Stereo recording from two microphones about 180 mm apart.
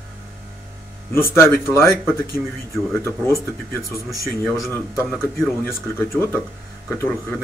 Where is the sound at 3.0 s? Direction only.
15° left (ahead or behind).